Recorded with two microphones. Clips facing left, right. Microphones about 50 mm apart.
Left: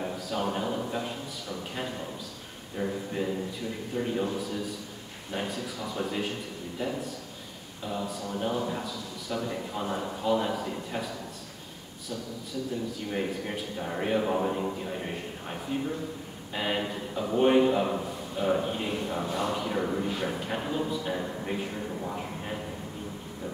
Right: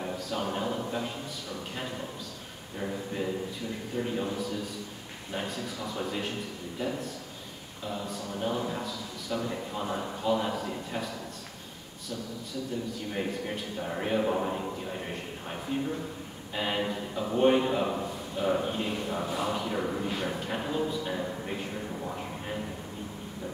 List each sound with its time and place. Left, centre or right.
0.0 s a man's voice: centre
13.1 s a man's voice: centre